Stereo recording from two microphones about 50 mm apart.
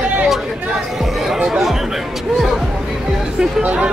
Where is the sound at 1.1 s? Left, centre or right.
Centre.